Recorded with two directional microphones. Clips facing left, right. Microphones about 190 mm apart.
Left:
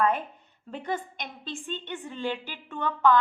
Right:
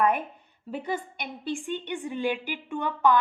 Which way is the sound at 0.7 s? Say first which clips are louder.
Right 1 dB; 10° right (ahead or behind).